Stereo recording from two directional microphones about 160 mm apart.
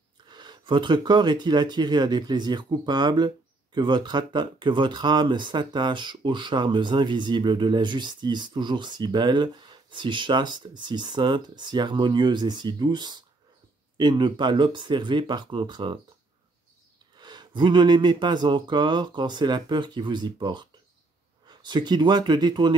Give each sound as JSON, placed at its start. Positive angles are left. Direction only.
{"t": 0.3, "sound": "speech", "side_deg": -25}
{"t": 17.2, "sound": "speech", "side_deg": -30}